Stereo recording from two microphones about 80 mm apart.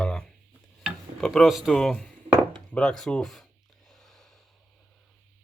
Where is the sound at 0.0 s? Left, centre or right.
Centre.